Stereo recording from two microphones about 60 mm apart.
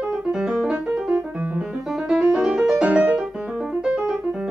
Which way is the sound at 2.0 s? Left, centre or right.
Centre.